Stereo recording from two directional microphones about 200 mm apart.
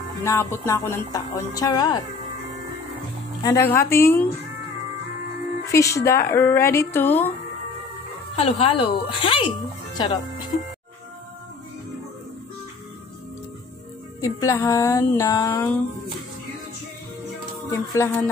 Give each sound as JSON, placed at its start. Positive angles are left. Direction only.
{"t": 0.2, "sound": "speech", "side_deg": 15}
{"t": 3.4, "sound": "speech", "side_deg": 15}
{"t": 5.7, "sound": "speech", "side_deg": 15}
{"t": 8.4, "sound": "speech", "side_deg": 30}
{"t": 14.2, "sound": "speech", "side_deg": 15}
{"t": 17.6, "sound": "speech", "side_deg": 15}